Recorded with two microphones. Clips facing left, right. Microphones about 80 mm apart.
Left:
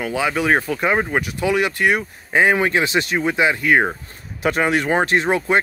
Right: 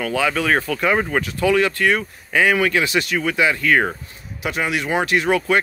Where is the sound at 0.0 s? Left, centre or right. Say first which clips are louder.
Even; centre.